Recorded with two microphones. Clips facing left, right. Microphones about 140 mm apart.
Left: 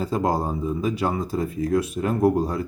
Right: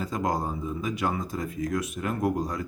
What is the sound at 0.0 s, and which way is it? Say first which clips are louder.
Speech: left 5 dB; 30° left (ahead or behind).